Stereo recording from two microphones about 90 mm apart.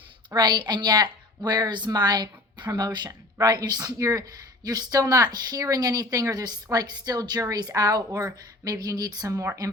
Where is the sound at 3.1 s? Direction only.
40° right (ahead or behind).